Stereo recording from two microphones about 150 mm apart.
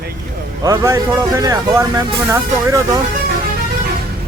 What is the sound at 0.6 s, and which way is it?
Speech, 20° right (ahead or behind).